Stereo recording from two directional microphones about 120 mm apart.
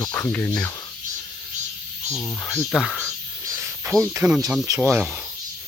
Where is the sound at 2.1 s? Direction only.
20° left (ahead or behind).